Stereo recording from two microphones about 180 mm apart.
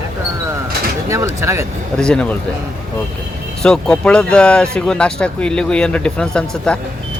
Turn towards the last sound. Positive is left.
turn(degrees=5)  # may be behind; listen again after turning